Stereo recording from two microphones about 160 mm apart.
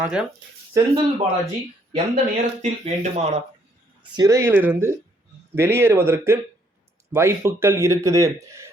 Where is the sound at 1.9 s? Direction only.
45° right (ahead or behind).